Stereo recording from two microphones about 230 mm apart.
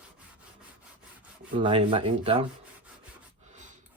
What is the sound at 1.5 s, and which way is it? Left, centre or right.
Speech, right.